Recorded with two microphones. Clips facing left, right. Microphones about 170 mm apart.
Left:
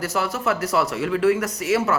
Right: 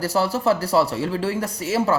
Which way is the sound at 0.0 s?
30° right (ahead or behind).